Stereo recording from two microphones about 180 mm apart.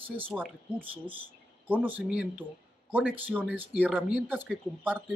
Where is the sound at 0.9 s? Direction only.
10° right (ahead or behind).